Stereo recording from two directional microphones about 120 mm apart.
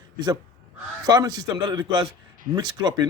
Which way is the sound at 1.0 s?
35° right (ahead or behind).